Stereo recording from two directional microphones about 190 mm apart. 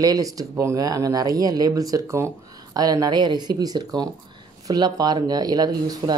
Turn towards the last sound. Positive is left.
turn(degrees=-20)  # may be behind; listen again after turning